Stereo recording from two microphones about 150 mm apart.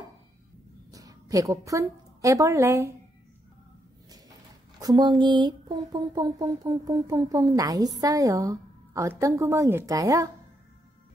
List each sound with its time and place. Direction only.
0.9 s a woman's voice: 25° right (ahead or behind)
4.7 s speech: 25° right (ahead or behind)